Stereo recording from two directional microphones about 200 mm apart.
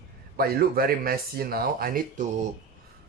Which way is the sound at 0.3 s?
50° right (ahead or behind).